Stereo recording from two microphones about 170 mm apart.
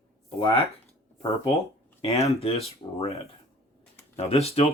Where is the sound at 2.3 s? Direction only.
35° left (ahead or behind).